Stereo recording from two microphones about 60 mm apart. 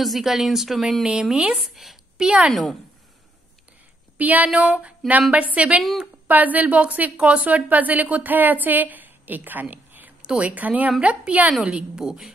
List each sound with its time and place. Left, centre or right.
0.0 s speech: centre
1.3 s a woman's voice: centre
1.6 s a woman's voice: centre
2.5 s speech: centre
4.2 s a woman's voice: right
4.5 s a woman's voice: centre
5.8 s a woman's voice: centre
6.2 s a woman's voice: right
10.2 s a woman's voice: centre